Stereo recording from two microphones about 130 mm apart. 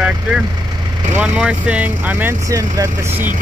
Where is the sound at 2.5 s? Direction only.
25° right (ahead or behind).